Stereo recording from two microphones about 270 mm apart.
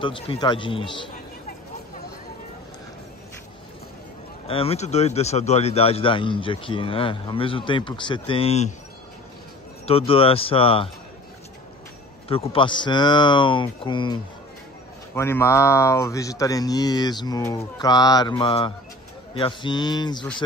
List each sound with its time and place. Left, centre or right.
0.0 s speech: centre
4.5 s speech: left
9.8 s speech: left
12.3 s speech: centre